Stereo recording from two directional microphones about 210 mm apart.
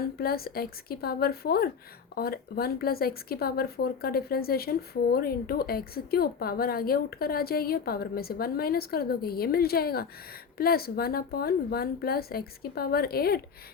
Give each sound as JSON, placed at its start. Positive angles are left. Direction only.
{"t": 0.2, "sound": "speech", "side_deg": 45}